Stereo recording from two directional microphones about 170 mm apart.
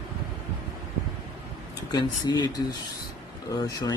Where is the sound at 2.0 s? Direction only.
25° left (ahead or behind).